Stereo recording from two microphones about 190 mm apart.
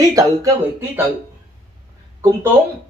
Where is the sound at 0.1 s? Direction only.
15° right (ahead or behind).